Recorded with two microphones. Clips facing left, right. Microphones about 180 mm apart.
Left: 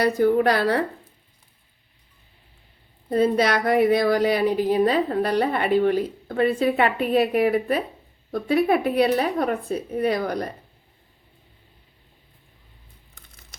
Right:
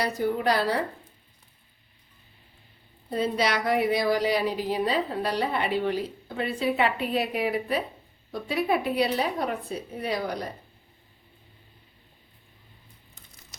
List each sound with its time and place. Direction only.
0.0 s speech: 60° left (ahead or behind)
3.1 s a woman's voice: 55° left (ahead or behind)